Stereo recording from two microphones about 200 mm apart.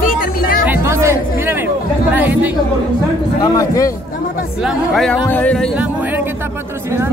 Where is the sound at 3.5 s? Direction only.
15° left (ahead or behind).